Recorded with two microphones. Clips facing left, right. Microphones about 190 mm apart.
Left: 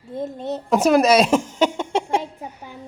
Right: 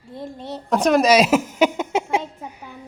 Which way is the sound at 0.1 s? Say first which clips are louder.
Left 5 dB; 20° left (ahead or behind).